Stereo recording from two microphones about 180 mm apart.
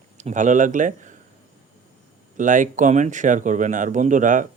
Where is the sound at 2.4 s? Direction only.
45° right (ahead or behind).